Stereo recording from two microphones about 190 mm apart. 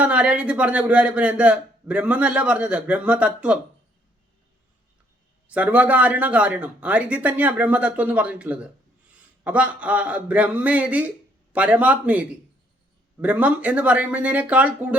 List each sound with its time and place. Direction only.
0.0 s speech: 5° right (ahead or behind)
5.5 s speech: 5° right (ahead or behind)
13.2 s speech: 5° right (ahead or behind)